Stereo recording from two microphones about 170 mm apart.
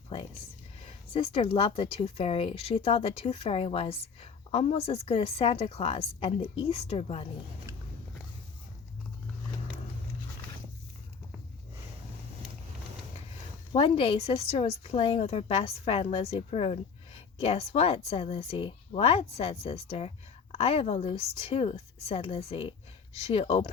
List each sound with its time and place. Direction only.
1.1 s speech: 35° left (ahead or behind)
13.7 s speech: 30° left (ahead or behind)